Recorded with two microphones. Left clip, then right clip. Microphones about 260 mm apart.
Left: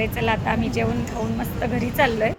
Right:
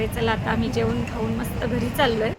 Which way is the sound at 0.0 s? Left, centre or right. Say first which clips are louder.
Left 1 dB; centre.